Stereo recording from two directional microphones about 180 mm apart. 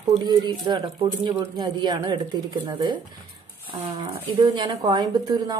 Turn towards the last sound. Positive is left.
turn(degrees=-20)  # may be behind; listen again after turning